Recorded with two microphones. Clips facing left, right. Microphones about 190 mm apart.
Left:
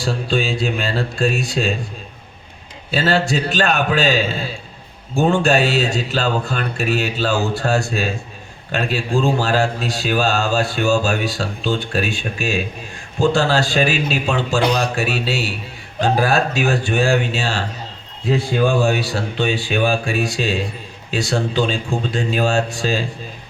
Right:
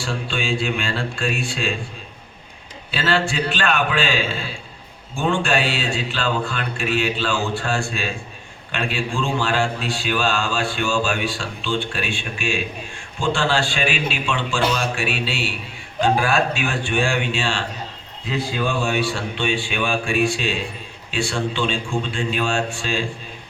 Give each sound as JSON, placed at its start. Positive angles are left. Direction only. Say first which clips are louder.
{"t": 0.0, "sound": "speech", "louder": "left 6 dB", "side_deg": 35}
{"t": 2.9, "sound": "a man's voice", "louder": "left 4 dB", "side_deg": 40}